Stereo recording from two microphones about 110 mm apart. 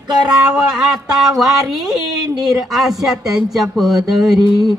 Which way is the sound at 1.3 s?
Centre (ahead or behind).